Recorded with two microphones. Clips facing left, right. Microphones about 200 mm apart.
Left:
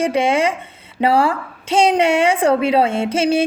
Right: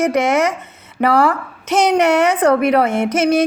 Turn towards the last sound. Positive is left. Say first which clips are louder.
# right 2 dB
turn(degrees=25)  # may be behind; listen again after turning